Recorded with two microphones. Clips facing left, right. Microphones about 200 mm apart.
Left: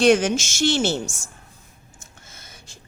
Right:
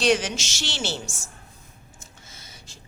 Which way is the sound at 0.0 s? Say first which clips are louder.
Left 6 dB; 50° left (ahead or behind).